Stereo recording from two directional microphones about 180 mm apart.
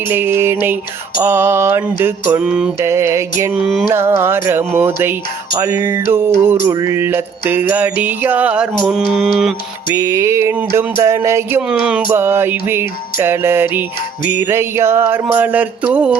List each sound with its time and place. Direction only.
0.1 s music: 10° right (ahead or behind)
2.8 s music: 15° right (ahead or behind)
9.9 s music: 15° right (ahead or behind)
11.7 s music: 5° right (ahead or behind)